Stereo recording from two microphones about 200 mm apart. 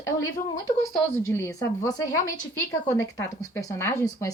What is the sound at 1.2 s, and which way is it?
A woman's voice, 15° left (ahead or behind).